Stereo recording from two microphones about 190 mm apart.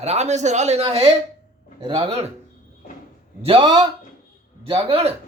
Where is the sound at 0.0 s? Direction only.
35° right (ahead or behind).